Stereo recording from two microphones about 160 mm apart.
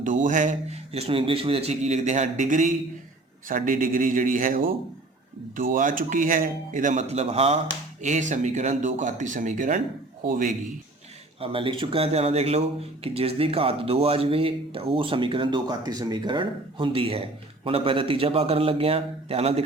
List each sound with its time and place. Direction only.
0.0 s a man's voice: 55° right (ahead or behind)
0.9 s a man's voice: 35° right (ahead or behind); by 10.5 s 60° right (ahead or behind)
11.3 s speech: 35° right (ahead or behind)